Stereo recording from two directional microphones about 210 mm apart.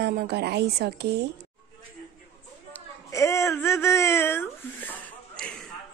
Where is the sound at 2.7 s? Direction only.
15° left (ahead or behind).